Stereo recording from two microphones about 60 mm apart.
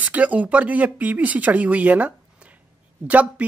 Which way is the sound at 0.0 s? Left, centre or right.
Right.